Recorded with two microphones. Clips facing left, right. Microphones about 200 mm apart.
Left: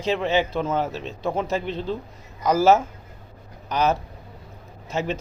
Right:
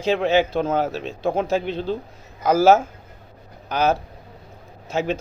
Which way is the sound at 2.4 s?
30° right (ahead or behind).